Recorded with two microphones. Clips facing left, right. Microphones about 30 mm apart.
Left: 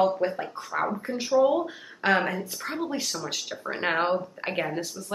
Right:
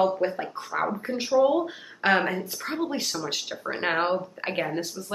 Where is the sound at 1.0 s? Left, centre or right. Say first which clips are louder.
Even; centre.